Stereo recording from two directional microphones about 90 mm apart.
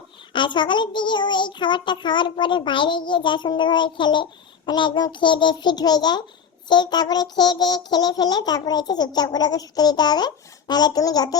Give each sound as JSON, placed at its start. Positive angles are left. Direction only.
{"t": 0.3, "sound": "a child's voice", "side_deg": 60}
{"t": 6.7, "sound": "child singing", "side_deg": 55}